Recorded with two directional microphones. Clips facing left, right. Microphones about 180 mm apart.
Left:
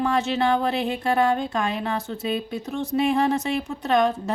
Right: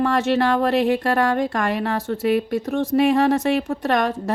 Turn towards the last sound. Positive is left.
turn(degrees=-65)  # may be behind; listen again after turning